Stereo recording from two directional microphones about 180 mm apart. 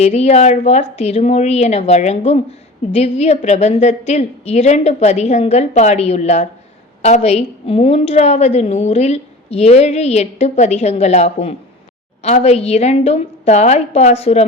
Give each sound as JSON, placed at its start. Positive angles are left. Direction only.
{"t": 0.0, "sound": "a woman's voice", "side_deg": 35}